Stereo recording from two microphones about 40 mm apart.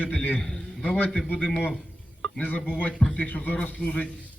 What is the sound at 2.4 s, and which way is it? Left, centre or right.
A man's voice, left.